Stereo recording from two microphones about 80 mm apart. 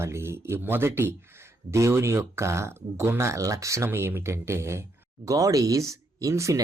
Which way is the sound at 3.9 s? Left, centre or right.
Right.